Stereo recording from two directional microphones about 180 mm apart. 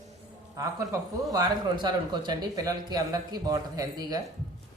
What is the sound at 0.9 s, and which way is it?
Speech, 15° right (ahead or behind).